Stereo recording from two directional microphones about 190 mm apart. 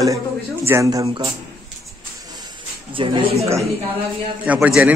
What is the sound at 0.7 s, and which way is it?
Speech, 15° right (ahead or behind).